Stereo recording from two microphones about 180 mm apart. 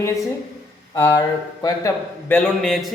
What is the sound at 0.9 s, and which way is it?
Speech, 15° left (ahead or behind).